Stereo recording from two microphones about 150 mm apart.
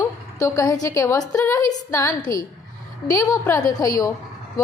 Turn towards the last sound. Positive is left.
turn(degrees=25)  # may be behind; listen again after turning